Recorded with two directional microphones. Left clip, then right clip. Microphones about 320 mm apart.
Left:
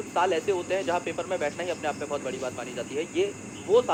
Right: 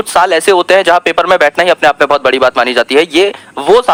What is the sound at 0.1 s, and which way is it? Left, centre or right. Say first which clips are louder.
Speech: right 17 dB; right.